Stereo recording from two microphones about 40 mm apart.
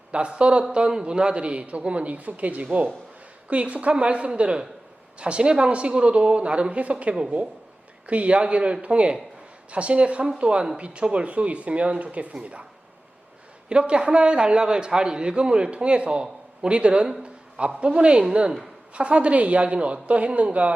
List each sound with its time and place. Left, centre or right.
0.1 s a man's voice: right
8.0 s a man's voice: right
13.7 s a man's voice: right